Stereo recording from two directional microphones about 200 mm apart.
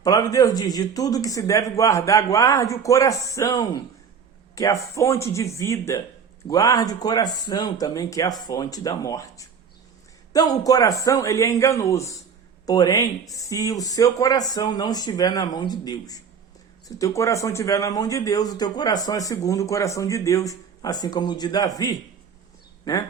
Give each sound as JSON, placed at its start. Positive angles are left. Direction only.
{"t": 0.0, "sound": "speech", "side_deg": 15}